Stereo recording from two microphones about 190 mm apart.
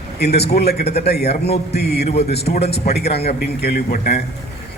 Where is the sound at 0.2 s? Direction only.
60° left (ahead or behind).